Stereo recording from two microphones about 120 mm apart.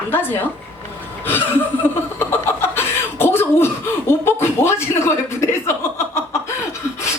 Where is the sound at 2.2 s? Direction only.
20° left (ahead or behind).